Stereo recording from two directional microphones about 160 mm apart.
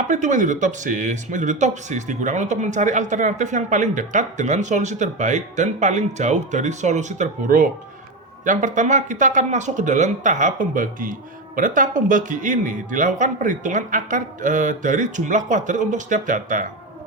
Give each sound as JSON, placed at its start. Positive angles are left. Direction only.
{"t": 0.1, "sound": "speech", "side_deg": -50}